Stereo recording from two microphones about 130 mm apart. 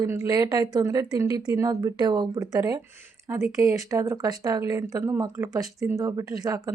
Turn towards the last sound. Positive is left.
turn(degrees=-25)  # may be behind; listen again after turning